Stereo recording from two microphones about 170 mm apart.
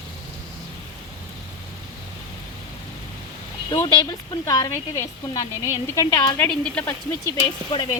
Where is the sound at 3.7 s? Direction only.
25° left (ahead or behind).